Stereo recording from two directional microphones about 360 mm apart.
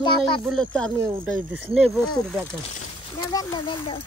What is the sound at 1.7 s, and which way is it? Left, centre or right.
Speech, centre.